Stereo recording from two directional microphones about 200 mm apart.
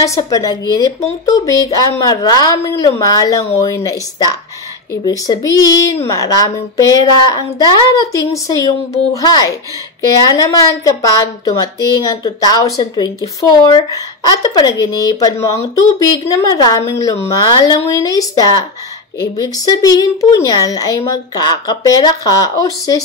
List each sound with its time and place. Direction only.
0.0 s a woman's voice: 15° left (ahead or behind)
5.0 s a woman's voice: 20° left (ahead or behind)